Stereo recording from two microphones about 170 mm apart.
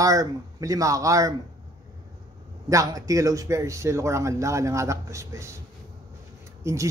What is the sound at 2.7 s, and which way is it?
A man's voice, 20° right (ahead or behind).